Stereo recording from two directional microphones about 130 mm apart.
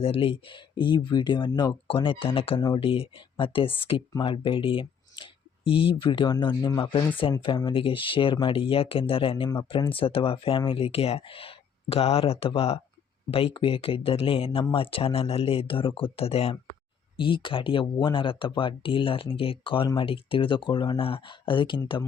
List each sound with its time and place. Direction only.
0.0 s speech: 45° left (ahead or behind)
2.6 s speech: 30° left (ahead or behind)
2.8 s speech: 45° left (ahead or behind)